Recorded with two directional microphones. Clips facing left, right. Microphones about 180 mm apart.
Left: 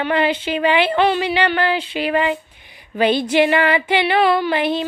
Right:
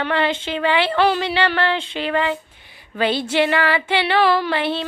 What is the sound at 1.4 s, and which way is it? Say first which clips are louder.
Female singing: left 1 dB; 10° left (ahead or behind).